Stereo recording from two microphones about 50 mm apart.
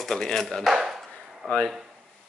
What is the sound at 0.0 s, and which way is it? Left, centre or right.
Speech, centre.